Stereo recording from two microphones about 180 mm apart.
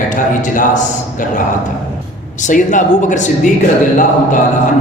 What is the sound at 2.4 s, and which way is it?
Speech, 45° left (ahead or behind).